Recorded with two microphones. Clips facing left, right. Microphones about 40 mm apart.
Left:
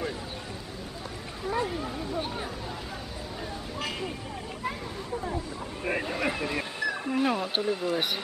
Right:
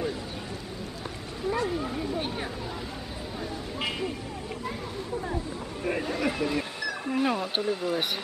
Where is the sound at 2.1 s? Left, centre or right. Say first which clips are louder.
Right 1 dB; right.